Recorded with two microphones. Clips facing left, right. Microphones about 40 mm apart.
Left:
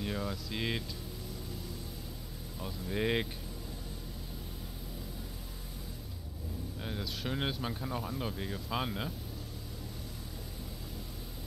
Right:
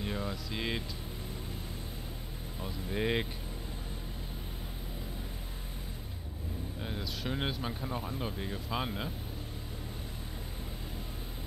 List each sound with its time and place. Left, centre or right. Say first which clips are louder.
0.0 s speech: even; centre
2.9 s speech: even; centre
6.8 s speech: even; centre